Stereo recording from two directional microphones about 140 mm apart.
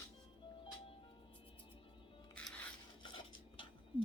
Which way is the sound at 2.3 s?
10° left (ahead or behind).